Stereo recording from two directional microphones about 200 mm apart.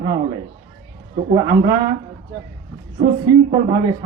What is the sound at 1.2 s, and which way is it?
Speech, 20° right (ahead or behind).